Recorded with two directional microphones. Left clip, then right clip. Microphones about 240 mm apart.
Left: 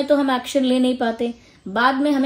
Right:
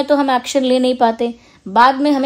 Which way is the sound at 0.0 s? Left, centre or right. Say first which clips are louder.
Right 4 dB; right.